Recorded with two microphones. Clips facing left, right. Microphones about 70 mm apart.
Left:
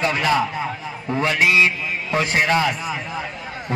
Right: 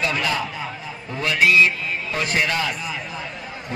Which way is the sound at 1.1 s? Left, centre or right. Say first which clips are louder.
Even; left.